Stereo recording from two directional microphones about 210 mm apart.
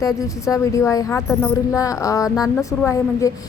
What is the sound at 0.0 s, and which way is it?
A woman's voice, 15° left (ahead or behind).